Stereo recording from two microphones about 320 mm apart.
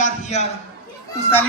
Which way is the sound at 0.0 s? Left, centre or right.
Left.